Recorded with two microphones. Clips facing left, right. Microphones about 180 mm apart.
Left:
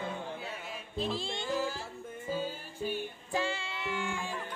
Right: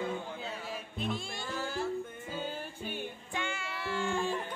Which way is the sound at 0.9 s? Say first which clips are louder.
Left 4 dB; 30° left (ahead or behind).